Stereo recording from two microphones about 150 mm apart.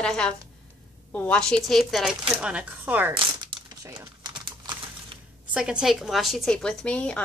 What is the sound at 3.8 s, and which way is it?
Crumpling, 25° right (ahead or behind).